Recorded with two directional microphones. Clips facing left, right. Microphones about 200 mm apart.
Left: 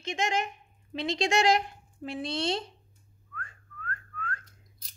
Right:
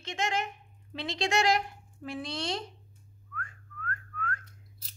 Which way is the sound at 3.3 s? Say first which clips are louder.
Right 1 dB; 30° left (ahead or behind).